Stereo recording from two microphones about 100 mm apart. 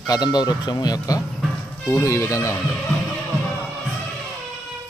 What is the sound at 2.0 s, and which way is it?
Speech, 30° left (ahead or behind).